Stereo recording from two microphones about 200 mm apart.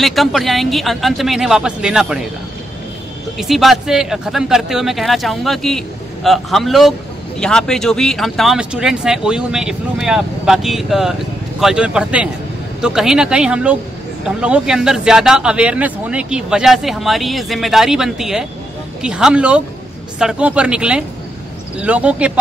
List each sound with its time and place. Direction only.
0.0 s speech: centre (ahead or behind)
3.3 s speech: centre (ahead or behind)